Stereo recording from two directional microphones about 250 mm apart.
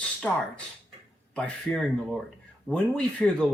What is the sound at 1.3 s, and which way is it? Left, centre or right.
Speech, centre.